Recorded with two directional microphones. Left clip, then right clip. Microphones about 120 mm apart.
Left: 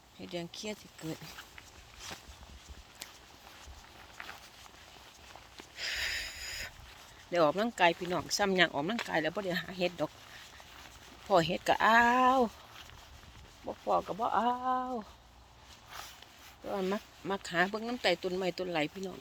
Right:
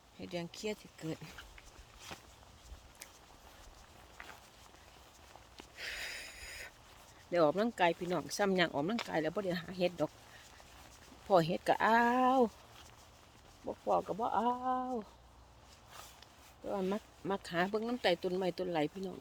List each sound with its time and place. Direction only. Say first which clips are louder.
0.2 s speech: left 1 dB; 40° right (ahead or behind)
5.7 s a sound: left 7 dB; 30° right (ahead or behind)
7.3 s speech: left 2 dB; 30° right (ahead or behind)
11.3 s speech: left 2 dB; 40° right (ahead or behind)
13.7 s speech: left 1 dB; 5° left (ahead or behind)
14.2 s speech: left 3 dB; 35° right (ahead or behind)
14.8 s speech: left 2 dB; 15° right (ahead or behind)
16.8 s speech: left 3 dB; 50° right (ahead or behind)